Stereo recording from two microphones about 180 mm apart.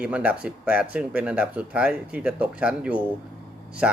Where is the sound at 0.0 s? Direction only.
5° right (ahead or behind).